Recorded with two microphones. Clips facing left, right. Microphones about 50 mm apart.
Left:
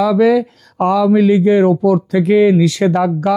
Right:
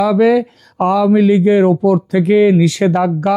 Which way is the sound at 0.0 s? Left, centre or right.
Right.